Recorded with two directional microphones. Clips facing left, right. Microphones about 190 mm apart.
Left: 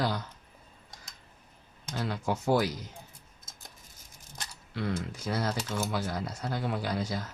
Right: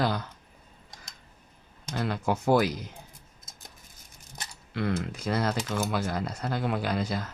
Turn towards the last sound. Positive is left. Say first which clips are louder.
# right 3 dB
turn(degrees=-60)  # may be behind; listen again after turning